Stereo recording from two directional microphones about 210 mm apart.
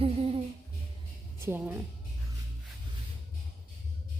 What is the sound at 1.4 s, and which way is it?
Speech, 10° right (ahead or behind).